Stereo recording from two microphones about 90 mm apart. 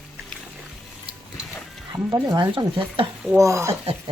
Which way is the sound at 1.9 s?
35° right (ahead or behind).